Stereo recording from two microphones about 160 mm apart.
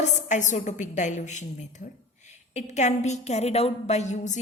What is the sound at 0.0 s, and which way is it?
A woman's voice, 50° left (ahead or behind).